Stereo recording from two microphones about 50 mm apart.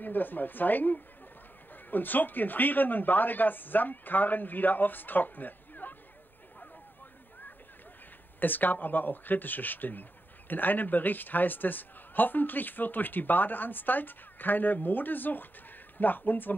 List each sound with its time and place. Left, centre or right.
0.0 s a man's voice: left
8.4 s a man's voice: left